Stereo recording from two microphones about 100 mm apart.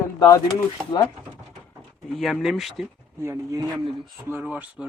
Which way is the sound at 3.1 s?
30° right (ahead or behind).